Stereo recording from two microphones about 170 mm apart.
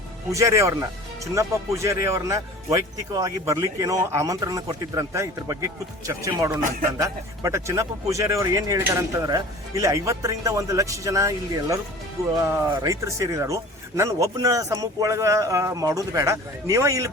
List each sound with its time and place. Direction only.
0.3 s speech: 15° right (ahead or behind)